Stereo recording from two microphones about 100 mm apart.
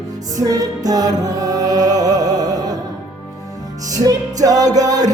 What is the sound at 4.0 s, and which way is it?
Music, 35° right (ahead or behind).